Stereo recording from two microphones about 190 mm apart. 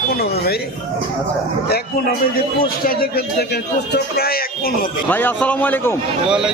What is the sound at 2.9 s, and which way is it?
A man's voice, 55° left (ahead or behind).